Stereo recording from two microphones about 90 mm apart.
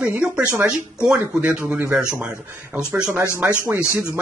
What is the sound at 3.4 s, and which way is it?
Speech, 20° right (ahead or behind).